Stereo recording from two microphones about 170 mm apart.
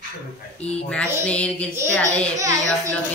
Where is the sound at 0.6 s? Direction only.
5° left (ahead or behind).